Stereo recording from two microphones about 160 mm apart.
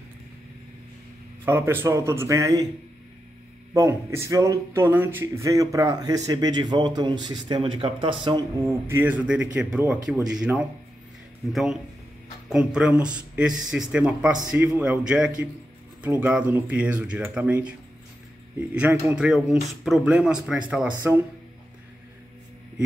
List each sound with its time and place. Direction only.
1.4 s speech: 15° right (ahead or behind)
3.7 s speech: 20° right (ahead or behind)
8.6 s speech: 15° right (ahead or behind)